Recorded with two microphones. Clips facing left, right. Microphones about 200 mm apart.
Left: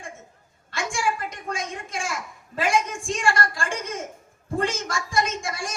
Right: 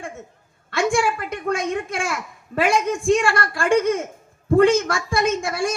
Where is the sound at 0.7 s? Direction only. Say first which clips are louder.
Right 7 dB; 60° right (ahead or behind).